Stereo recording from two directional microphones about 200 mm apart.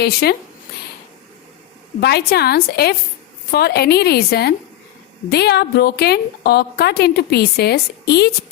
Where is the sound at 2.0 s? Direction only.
55° left (ahead or behind).